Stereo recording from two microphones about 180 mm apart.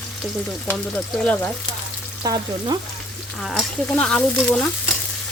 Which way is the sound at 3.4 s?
5° left (ahead or behind).